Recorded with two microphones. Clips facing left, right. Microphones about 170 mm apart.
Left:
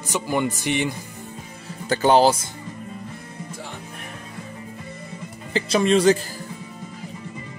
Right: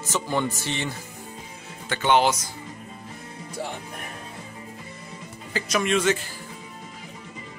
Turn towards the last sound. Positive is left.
turn(degrees=35)  # may be behind; listen again after turning